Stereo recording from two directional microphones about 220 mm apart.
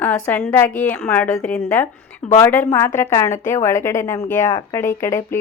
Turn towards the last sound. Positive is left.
turn(degrees=10)  # may be behind; listen again after turning